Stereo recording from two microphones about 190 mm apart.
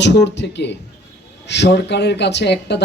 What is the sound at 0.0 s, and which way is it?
Speech, 65° left (ahead or behind).